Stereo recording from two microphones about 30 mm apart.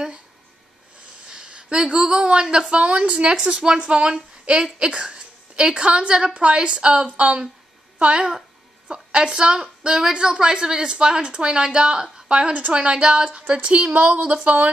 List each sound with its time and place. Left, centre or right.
1.2 s a sound: right
2.3 s a woman's voice: right
2.8 s a woman's voice: right
3.3 s a woman's voice: right
14.0 s speech: right